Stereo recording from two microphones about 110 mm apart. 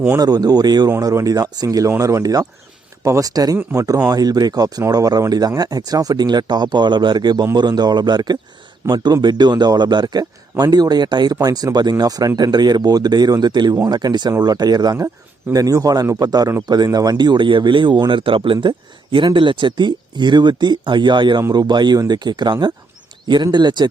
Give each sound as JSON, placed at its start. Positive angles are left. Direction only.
{"t": 0.2, "sound": "speech", "side_deg": -35}